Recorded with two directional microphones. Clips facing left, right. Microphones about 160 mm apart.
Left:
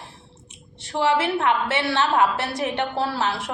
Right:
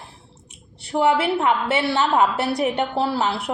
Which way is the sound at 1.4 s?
15° right (ahead or behind).